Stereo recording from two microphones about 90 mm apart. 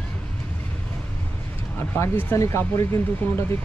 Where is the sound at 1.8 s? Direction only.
20° left (ahead or behind).